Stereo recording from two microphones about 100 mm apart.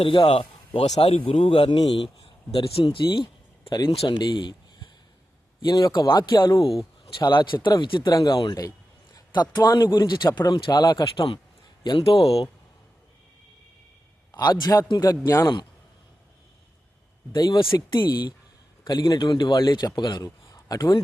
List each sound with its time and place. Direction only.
0.0 s speech: 60° left (ahead or behind)
3.7 s speech: 45° left (ahead or behind)
4.1 s a sound: 50° left (ahead or behind)
5.6 s a man's voice: 45° left (ahead or behind)
8.1 s a man's voice: 40° left (ahead or behind)
12.0 s speech: 75° left (ahead or behind)
14.3 s speech: 40° left (ahead or behind)
17.3 s a man's voice: 50° left (ahead or behind)